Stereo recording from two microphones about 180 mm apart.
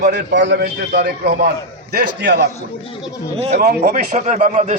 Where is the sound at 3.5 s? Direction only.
55° right (ahead or behind).